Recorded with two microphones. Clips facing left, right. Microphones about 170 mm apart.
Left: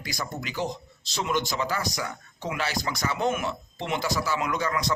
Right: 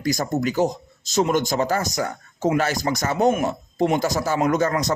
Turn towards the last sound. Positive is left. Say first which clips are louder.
# right 8 dB
turn(degrees=-45)  # may be behind; listen again after turning